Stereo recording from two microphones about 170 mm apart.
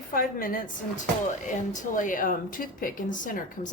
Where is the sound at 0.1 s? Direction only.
55° left (ahead or behind).